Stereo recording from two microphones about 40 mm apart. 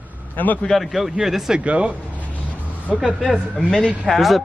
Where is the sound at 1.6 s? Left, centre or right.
Right.